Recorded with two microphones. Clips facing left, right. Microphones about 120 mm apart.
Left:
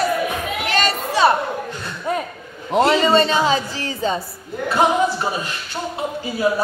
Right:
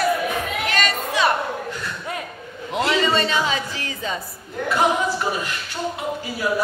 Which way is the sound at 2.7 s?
35° left (ahead or behind).